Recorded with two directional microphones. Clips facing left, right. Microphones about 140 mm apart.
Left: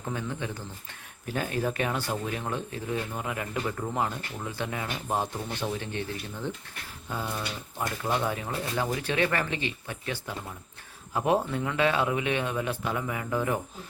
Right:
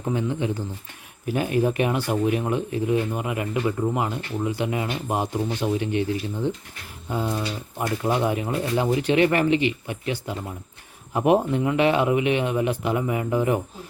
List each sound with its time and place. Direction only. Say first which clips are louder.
0.0 s speech: right 8 dB; 20° right (ahead or behind)